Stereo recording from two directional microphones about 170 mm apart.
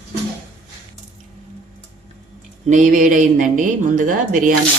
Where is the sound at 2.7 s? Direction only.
45° right (ahead or behind).